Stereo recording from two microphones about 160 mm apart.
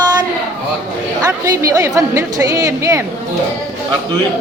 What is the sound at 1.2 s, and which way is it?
A woman's voice, 20° right (ahead or behind).